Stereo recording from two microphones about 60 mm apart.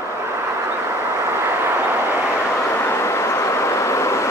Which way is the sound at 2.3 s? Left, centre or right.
Left.